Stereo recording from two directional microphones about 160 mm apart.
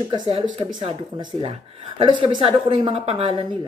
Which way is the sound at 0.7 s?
30° right (ahead or behind).